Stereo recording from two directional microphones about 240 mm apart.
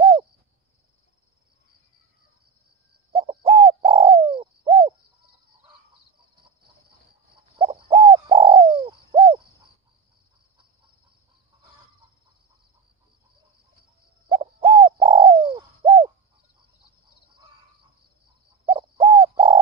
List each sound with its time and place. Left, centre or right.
3.1 s bird: right
7.5 s bird: right
14.3 s bird: right
18.7 s bird: right